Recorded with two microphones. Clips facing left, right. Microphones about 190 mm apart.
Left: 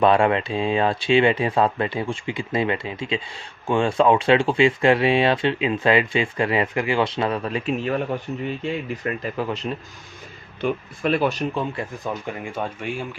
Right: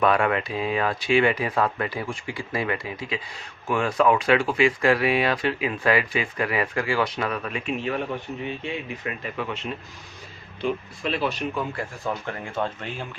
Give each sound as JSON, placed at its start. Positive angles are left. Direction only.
{"t": 0.0, "sound": "speech", "side_deg": 25}
{"t": 9.0, "sound": "speech", "side_deg": 40}
{"t": 10.6, "sound": "speech", "side_deg": 50}
{"t": 11.5, "sound": "speech", "side_deg": 20}